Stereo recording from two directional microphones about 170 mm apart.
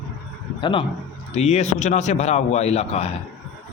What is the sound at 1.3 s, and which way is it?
A man's voice, 40° left (ahead or behind).